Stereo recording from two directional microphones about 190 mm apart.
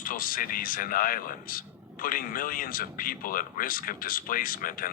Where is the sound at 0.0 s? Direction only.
45° left (ahead or behind).